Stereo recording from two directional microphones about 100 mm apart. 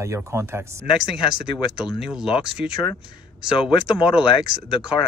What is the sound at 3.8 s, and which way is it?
Speech, 10° right (ahead or behind).